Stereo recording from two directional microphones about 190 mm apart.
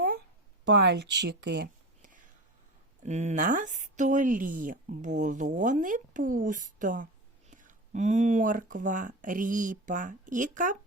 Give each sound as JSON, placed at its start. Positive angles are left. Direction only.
{"t": 0.7, "sound": "speech", "side_deg": -65}
{"t": 3.0, "sound": "speech", "side_deg": -35}